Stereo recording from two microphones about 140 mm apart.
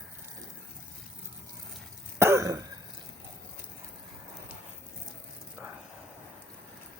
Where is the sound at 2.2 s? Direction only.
20° right (ahead or behind).